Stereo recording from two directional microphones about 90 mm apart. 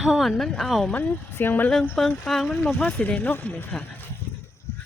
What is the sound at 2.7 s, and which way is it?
Speech, 20° left (ahead or behind).